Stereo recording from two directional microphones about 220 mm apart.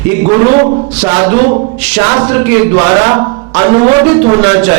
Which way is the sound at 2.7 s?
25° right (ahead or behind).